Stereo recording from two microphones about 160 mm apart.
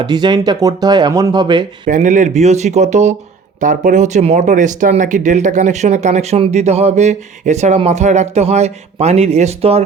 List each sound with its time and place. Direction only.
0.0 s speech: 25° right (ahead or behind)
1.9 s speech: 50° right (ahead or behind)